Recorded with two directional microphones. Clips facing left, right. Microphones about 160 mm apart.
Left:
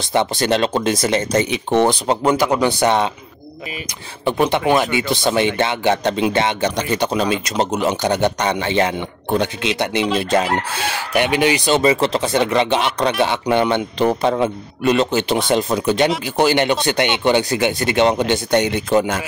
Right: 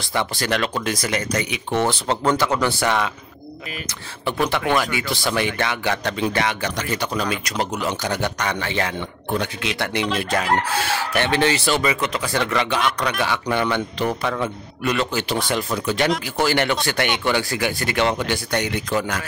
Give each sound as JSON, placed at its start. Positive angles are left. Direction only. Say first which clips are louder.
{"t": 0.0, "sound": "speech", "louder": "left 6 dB", "side_deg": 20}
{"t": 4.2, "sound": "speech", "louder": "left 5 dB", "side_deg": 20}
{"t": 11.8, "sound": "speech", "louder": "left 7 dB", "side_deg": 30}